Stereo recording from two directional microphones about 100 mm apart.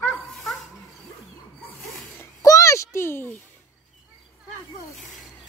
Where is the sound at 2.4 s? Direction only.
30° left (ahead or behind).